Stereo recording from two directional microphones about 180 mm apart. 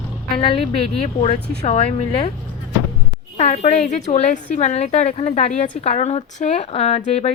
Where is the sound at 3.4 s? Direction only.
40° left (ahead or behind).